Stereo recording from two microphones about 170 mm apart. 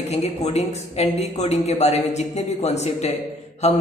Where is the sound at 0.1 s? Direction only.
40° left (ahead or behind).